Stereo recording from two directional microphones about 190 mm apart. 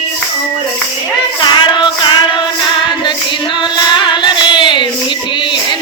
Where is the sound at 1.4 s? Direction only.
25° left (ahead or behind).